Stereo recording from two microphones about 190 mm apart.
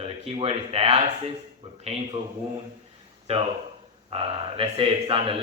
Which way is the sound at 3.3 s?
35° right (ahead or behind).